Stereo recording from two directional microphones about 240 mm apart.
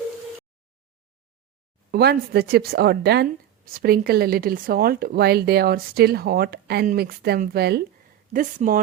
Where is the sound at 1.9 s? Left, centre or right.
Right.